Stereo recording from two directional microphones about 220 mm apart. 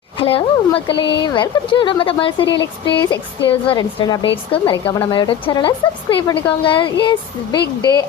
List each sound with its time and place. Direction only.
0.2 s speech: 25° left (ahead or behind)